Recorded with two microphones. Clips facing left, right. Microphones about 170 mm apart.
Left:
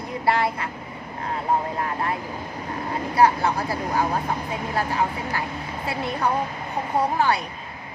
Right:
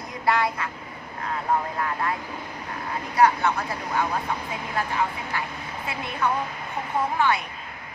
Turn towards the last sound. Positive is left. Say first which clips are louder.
# left 2 dB
turn(degrees=35)  # may be behind; listen again after turning